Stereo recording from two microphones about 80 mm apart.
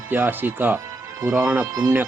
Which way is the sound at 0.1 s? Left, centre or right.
Right.